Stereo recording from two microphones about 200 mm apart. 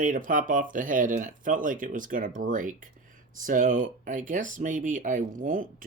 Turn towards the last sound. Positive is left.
turn(degrees=-45)  # may be behind; listen again after turning